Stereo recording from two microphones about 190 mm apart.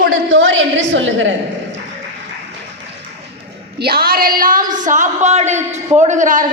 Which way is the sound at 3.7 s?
55° right (ahead or behind).